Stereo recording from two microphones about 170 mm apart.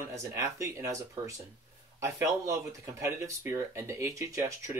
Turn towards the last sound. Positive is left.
turn(degrees=-15)  # may be behind; listen again after turning